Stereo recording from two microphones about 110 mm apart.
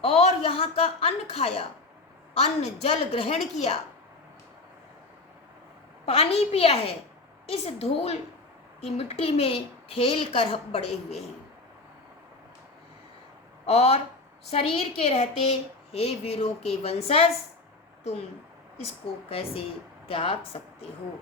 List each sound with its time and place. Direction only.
0.0 s a woman's voice: 70° left (ahead or behind)
6.1 s a woman's voice: 65° left (ahead or behind)
13.7 s a woman's voice: 70° left (ahead or behind)
19.3 s a woman's voice: 60° left (ahead or behind)